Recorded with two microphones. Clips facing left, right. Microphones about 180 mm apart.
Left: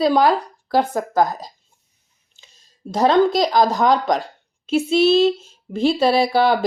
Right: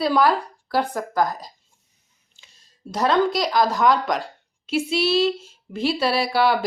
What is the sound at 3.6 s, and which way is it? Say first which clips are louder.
Speech: even; 45° left (ahead or behind).